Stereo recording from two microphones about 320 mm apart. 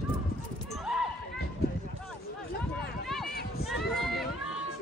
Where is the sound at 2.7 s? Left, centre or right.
Centre.